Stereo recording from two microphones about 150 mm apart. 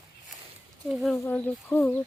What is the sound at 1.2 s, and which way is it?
Speech, 10° left (ahead or behind).